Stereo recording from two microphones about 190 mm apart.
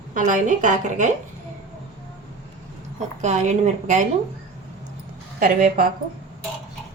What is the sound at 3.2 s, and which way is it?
Speech, 35° right (ahead or behind).